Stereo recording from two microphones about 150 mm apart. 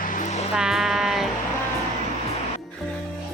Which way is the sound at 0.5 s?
5° right (ahead or behind).